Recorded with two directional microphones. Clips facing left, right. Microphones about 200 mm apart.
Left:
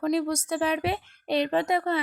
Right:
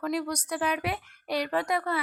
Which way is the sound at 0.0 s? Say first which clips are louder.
Left 5 dB; 25° left (ahead or behind).